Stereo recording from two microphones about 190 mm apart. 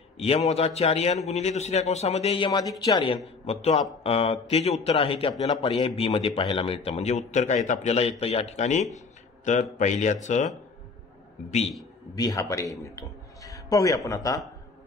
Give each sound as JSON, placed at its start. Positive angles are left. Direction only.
{"t": 0.2, "sound": "a man's voice", "side_deg": 35}
{"t": 3.4, "sound": "a man's voice", "side_deg": 35}
{"t": 12.2, "sound": "a man's voice", "side_deg": 15}